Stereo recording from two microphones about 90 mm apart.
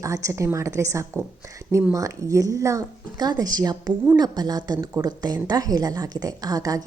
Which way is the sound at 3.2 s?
45° right (ahead or behind).